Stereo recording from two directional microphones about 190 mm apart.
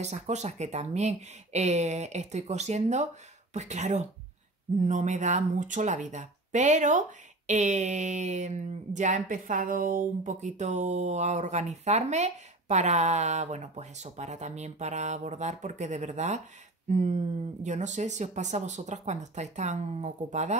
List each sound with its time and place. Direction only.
0.0 s speech: 35° right (ahead or behind)